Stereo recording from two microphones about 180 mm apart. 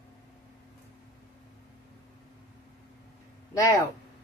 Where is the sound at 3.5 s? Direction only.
20° left (ahead or behind).